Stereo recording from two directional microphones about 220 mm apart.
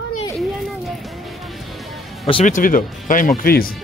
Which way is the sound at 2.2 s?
25° left (ahead or behind).